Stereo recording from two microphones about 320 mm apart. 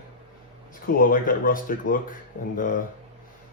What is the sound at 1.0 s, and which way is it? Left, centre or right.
Speech, left.